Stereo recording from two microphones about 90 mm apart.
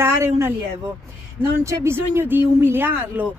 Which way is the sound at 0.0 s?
30° right (ahead or behind).